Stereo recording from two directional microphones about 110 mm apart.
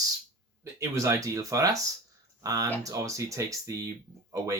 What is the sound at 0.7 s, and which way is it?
Speech, 25° right (ahead or behind).